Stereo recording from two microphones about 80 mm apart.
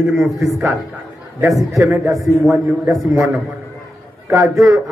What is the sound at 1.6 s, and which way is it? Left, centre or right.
A man's voice, centre.